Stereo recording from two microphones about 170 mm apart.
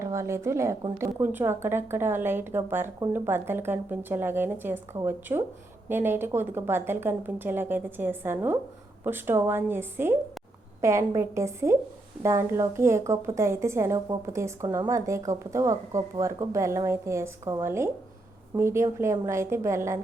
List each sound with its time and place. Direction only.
0.0 s a woman's voice: 15° right (ahead or behind)